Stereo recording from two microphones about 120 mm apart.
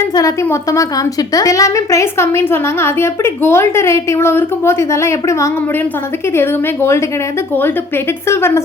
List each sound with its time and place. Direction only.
0.1 s a woman's voice: 25° left (ahead or behind)
8.3 s a woman's voice: 20° left (ahead or behind)